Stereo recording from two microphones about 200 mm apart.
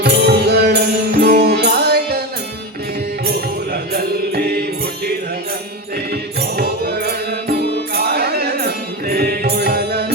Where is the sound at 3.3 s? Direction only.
50° right (ahead or behind).